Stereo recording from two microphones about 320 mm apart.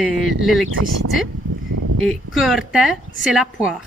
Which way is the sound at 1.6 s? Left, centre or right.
Right.